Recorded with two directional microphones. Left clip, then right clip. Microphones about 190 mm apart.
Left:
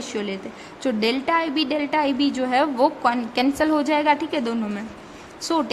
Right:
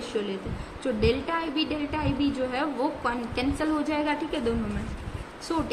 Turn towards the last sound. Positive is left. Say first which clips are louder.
# left 6 dB
turn(degrees=60)  # may be behind; listen again after turning